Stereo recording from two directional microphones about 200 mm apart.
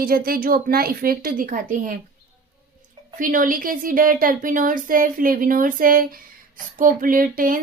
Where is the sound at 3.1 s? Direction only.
40° right (ahead or behind).